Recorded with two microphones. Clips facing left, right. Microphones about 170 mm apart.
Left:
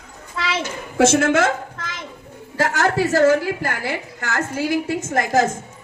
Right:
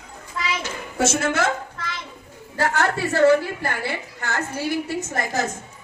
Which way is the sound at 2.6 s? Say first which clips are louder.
Left 1 dB; 40° left (ahead or behind).